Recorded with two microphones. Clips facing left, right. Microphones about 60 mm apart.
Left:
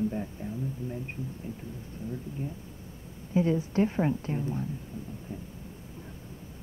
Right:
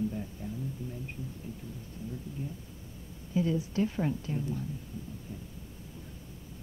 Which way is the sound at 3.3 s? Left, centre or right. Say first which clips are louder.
Left 4 dB; left.